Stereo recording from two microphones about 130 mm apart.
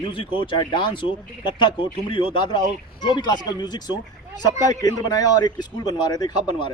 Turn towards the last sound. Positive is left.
turn(degrees=35)  # may be behind; listen again after turning